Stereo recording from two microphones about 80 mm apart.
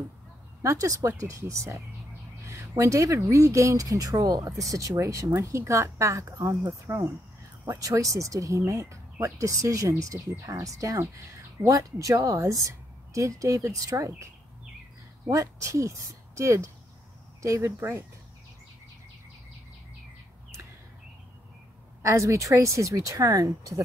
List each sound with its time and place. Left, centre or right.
0.6 s speech: right
22.0 s speech: right